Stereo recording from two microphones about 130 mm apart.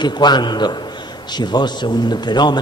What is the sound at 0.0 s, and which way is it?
A man's voice, 35° left (ahead or behind).